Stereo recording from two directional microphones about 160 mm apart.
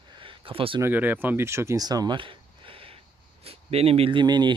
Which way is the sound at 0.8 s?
10° right (ahead or behind).